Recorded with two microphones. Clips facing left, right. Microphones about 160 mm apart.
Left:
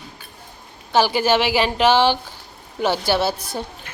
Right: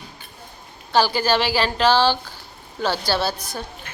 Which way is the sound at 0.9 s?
20° left (ahead or behind).